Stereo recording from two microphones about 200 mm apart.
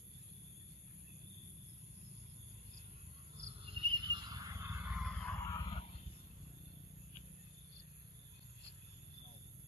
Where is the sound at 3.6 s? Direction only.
25° right (ahead or behind); by 5.1 s 5° right (ahead or behind).